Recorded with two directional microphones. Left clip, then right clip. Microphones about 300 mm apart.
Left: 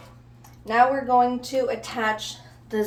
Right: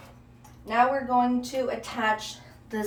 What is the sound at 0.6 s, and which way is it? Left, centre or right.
A woman's voice, left.